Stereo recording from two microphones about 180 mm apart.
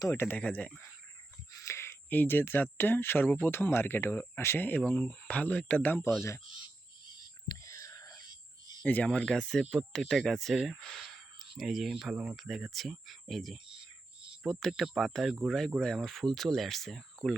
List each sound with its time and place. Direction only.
0.0 s speech: 15° left (ahead or behind)
7.4 s whispering: 20° left (ahead or behind)
8.8 s speech: 5° left (ahead or behind)